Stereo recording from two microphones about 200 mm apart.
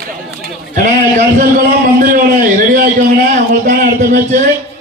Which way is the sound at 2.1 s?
45° right (ahead or behind).